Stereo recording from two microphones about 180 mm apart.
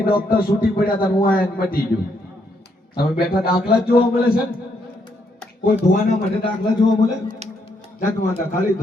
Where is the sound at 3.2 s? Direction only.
60° left (ahead or behind).